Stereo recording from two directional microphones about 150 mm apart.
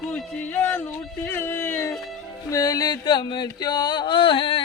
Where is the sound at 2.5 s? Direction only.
25° left (ahead or behind).